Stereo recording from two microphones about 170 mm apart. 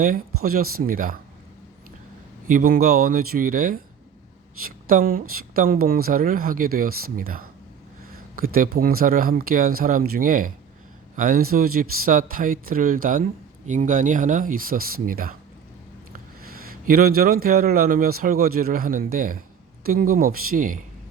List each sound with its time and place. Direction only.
0.0 s a man's voice: 55° right (ahead or behind)
2.5 s a man's voice: 55° right (ahead or behind)
4.9 s a man's voice: 55° right (ahead or behind)
16.5 s a man's voice: 60° right (ahead or behind)